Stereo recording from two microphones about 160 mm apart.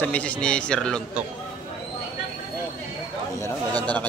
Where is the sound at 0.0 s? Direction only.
10° left (ahead or behind).